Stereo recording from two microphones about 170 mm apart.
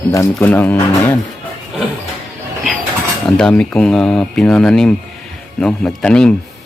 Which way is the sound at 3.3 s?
5° left (ahead or behind).